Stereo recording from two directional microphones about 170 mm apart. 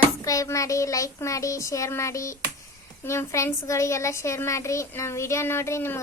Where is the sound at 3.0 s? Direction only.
15° left (ahead or behind).